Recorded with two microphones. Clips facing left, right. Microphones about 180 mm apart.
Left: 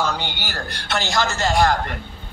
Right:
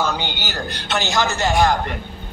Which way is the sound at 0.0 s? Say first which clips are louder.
Right 1 dB; centre (ahead or behind).